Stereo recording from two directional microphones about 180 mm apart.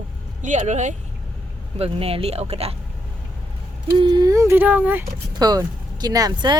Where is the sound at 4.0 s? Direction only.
25° right (ahead or behind).